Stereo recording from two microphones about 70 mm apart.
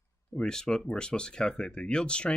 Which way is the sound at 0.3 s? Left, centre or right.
Centre.